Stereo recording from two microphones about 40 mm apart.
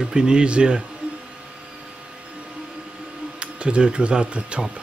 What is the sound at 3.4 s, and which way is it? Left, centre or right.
Speech, right.